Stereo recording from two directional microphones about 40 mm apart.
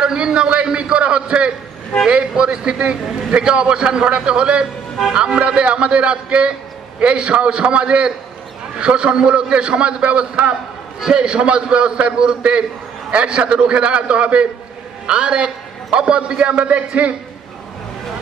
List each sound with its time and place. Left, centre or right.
0.0 s a man's voice: centre
11.0 s a man's voice: right